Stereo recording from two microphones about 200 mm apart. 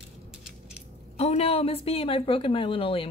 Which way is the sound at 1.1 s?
30° left (ahead or behind).